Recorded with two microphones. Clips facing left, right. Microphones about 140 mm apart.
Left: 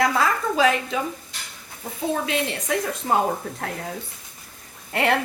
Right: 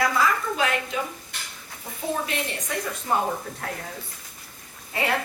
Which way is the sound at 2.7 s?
90° left.